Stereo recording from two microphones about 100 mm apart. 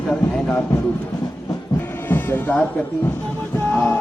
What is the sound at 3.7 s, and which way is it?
Music, 15° left (ahead or behind).